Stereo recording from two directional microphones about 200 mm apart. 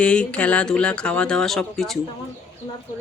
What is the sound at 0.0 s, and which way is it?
Speech, 5° left (ahead or behind).